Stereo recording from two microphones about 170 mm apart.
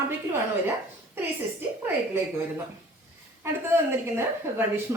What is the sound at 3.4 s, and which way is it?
A woman's voice, 15° right (ahead or behind).